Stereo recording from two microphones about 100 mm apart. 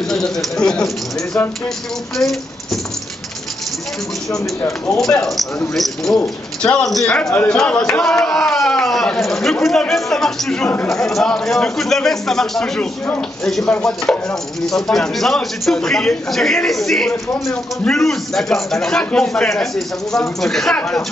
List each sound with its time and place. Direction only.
0.1 s a man's voice: 5° left (ahead or behind)
4.6 s speech: 25° left (ahead or behind)
5.1 s a man's voice: 5° left (ahead or behind)
6.6 s a man's voice: 5° left (ahead or behind)